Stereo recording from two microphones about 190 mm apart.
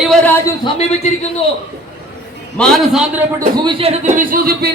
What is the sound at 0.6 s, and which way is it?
Speech, 35° left (ahead or behind).